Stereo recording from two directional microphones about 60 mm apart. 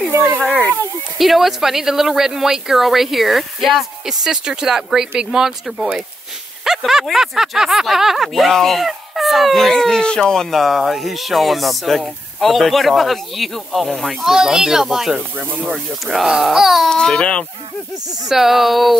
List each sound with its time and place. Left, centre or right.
1.1 s speech: centre
15.1 s speech: right
15.7 s speech: centre
16.9 s speech: centre
18.3 s speech: centre